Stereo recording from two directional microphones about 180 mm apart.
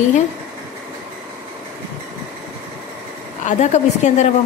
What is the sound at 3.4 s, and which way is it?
Speech, 40° left (ahead or behind).